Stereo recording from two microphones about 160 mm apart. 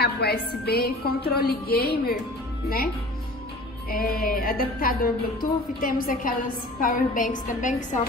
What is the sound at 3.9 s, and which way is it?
A woman's voice, 65° left (ahead or behind).